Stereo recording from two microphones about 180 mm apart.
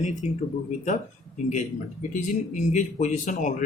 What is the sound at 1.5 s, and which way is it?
Speech, 40° left (ahead or behind).